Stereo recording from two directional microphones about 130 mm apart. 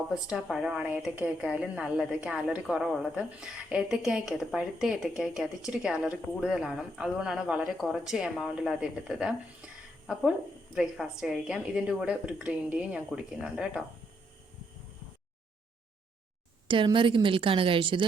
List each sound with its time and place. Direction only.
0.1 s a woman's voice: 5° right (ahead or behind)
10.8 s a woman's voice: 5° right (ahead or behind)
16.6 s a woman's voice: 40° right (ahead or behind)